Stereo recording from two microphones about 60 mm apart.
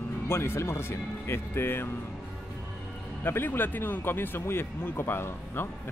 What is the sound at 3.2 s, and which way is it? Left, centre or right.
Speech, left.